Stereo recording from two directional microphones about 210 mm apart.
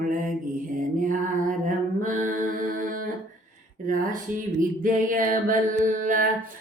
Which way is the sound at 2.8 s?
40° right (ahead or behind).